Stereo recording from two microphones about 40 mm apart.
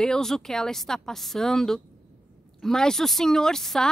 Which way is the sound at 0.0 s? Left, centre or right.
Centre.